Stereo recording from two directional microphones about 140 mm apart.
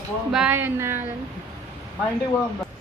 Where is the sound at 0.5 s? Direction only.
15° right (ahead or behind).